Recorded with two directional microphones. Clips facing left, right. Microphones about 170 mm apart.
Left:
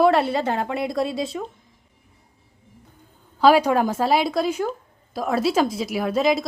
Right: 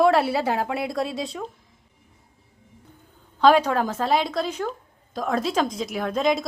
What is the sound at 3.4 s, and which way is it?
A woman's voice, 10° left (ahead or behind).